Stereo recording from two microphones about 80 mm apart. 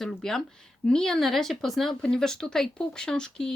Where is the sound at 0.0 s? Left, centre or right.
Centre.